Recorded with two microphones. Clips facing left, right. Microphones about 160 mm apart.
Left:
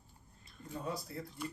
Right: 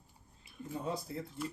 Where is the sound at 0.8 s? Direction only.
25° right (ahead or behind).